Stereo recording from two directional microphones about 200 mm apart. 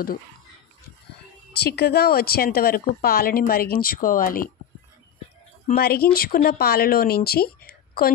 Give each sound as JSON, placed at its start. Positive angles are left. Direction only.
{"t": 1.5, "sound": "speech", "side_deg": 55}
{"t": 5.7, "sound": "speech", "side_deg": 50}